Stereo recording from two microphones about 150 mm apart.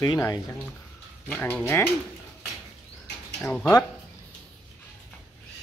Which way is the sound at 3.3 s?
5° left (ahead or behind).